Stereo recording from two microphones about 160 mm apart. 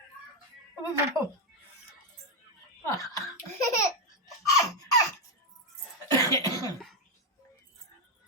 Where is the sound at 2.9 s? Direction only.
20° left (ahead or behind).